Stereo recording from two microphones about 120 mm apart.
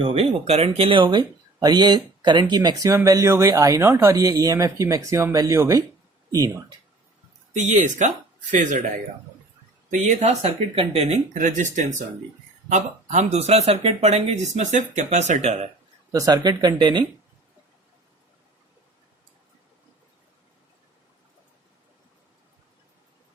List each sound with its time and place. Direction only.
0.0 s speech: 55° right (ahead or behind); by 6.7 s 30° right (ahead or behind)
7.5 s speech: 85° right
9.9 s speech: 80° right
16.1 s speech: 30° right (ahead or behind)